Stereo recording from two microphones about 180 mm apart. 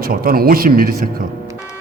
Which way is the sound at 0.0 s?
55° right (ahead or behind).